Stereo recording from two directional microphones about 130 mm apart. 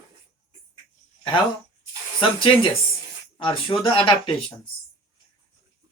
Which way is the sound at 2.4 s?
45° left (ahead or behind).